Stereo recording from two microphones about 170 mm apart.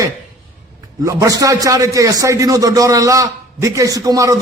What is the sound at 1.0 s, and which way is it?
A man's voice, 20° right (ahead or behind).